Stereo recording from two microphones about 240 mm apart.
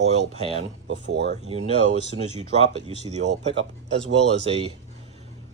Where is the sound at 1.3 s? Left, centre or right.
Right.